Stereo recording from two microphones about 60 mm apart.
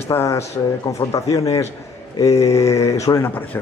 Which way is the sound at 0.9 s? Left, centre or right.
Left.